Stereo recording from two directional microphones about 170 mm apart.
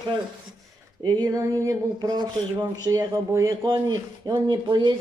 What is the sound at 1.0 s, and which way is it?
Speech, 20° right (ahead or behind).